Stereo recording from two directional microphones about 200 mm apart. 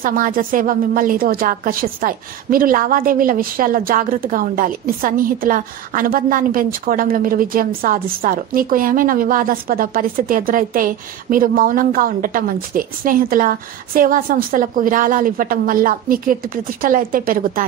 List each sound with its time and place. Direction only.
0.0 s a woman's voice: 45° right (ahead or behind)